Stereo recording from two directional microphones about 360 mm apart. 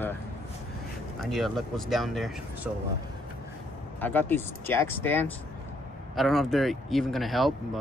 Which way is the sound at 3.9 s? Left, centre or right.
Centre.